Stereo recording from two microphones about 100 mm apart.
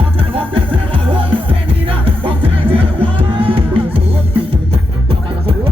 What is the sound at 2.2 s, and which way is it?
Music, 65° right (ahead or behind).